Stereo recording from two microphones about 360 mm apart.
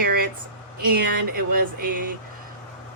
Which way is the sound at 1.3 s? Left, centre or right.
Right.